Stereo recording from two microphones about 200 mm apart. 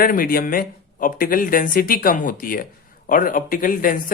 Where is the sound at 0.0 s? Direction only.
45° left (ahead or behind).